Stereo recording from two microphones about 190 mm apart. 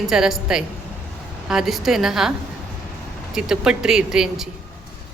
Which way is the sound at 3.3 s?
5° right (ahead or behind).